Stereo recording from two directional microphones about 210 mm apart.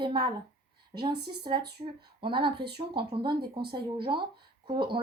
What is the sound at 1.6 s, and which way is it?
Speech, 50° right (ahead or behind).